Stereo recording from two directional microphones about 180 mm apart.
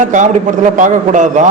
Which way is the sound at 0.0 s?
45° right (ahead or behind).